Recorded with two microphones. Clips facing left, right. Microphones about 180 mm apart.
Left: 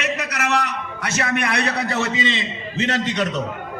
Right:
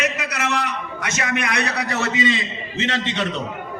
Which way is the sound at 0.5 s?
35° left (ahead or behind).